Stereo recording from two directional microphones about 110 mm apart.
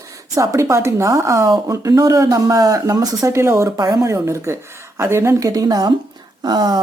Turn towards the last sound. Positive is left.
turn(degrees=-40)  # may be behind; listen again after turning